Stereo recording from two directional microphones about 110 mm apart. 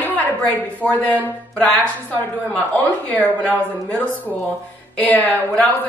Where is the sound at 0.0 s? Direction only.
15° left (ahead or behind).